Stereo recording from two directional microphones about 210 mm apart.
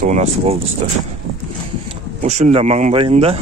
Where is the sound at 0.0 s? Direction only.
30° right (ahead or behind).